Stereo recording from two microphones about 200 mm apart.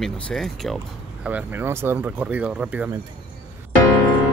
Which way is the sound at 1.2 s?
10° right (ahead or behind).